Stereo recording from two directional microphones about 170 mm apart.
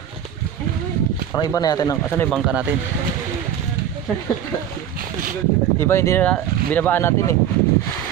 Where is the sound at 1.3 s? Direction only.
20° left (ahead or behind).